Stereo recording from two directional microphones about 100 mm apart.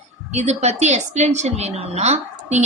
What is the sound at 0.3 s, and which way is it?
A woman's voice, 90° right.